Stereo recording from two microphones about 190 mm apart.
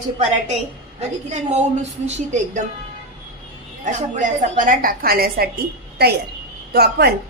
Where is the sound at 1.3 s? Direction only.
35° right (ahead or behind).